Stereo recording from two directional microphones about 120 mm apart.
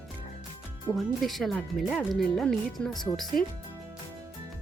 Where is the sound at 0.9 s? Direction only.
Centre (ahead or behind).